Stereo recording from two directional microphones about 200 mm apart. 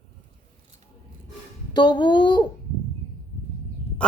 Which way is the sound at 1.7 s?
20° left (ahead or behind).